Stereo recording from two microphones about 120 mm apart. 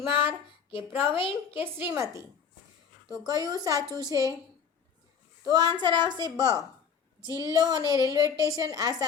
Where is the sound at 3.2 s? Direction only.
35° right (ahead or behind).